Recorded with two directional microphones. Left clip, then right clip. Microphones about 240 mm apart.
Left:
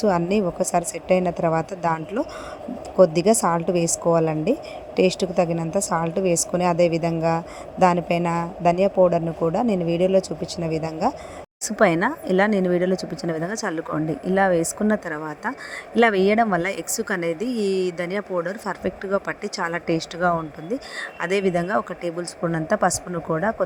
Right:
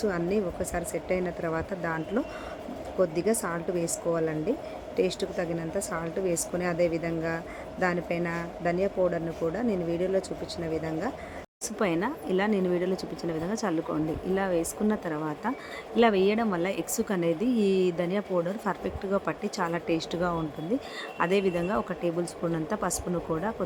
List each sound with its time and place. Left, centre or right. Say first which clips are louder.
0.0 s a woman's voice: left 8 dB; left